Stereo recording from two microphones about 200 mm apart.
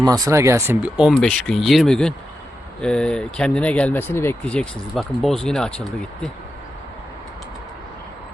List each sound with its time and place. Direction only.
0.0 s speech: 20° right (ahead or behind); by 6.3 s 5° left (ahead or behind)